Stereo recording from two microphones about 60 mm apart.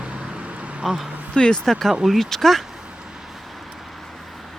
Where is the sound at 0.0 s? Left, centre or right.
Centre.